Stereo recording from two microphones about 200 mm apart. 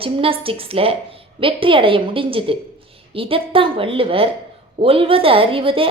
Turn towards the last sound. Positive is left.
turn(degrees=-25)  # may be behind; listen again after turning